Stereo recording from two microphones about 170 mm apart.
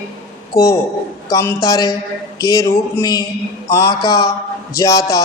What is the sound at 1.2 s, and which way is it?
Music, 20° left (ahead or behind).